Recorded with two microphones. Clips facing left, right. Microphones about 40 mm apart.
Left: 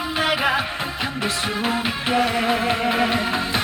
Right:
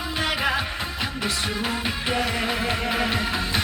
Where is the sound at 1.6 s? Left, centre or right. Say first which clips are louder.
Left 4 dB; centre.